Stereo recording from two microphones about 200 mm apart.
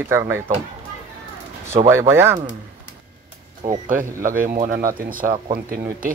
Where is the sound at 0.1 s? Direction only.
15° right (ahead or behind).